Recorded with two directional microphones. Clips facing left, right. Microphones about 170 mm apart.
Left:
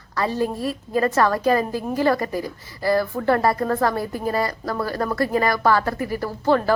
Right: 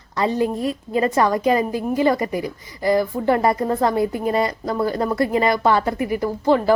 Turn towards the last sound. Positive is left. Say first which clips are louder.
# right 2 dB
turn(degrees=-15)  # may be behind; listen again after turning